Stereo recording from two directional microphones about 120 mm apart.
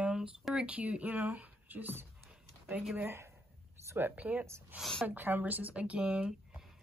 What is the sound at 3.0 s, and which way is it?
Speech, 20° right (ahead or behind).